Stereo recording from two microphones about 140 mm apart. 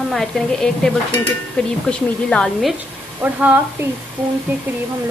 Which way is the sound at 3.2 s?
10° right (ahead or behind).